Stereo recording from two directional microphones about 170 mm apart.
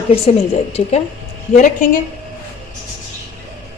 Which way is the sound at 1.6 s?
50° left (ahead or behind).